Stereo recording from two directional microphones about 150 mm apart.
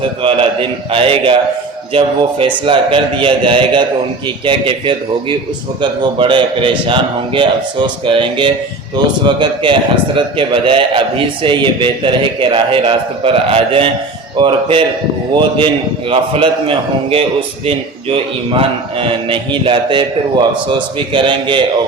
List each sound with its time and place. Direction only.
0.2 s a man's voice: 35° right (ahead or behind)
16.0 s a man's voice: 40° right (ahead or behind)